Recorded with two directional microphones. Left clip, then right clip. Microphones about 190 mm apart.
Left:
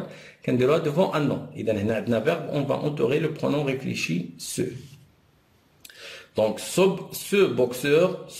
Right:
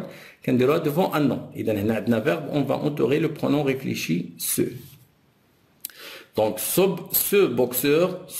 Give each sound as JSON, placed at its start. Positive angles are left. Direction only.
{"t": 0.1, "sound": "speech", "side_deg": -25}
{"t": 5.8, "sound": "speech", "side_deg": -25}